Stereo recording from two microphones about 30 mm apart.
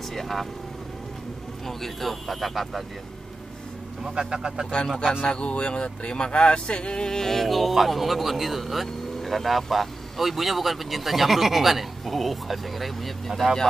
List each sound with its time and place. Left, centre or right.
0.1 s speech: centre
1.7 s speech: centre
4.0 s speech: right
5.2 s speech: left
7.2 s speech: centre
7.4 s speech: centre